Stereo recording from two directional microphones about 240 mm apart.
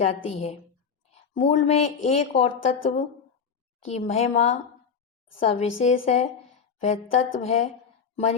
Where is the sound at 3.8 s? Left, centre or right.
Left.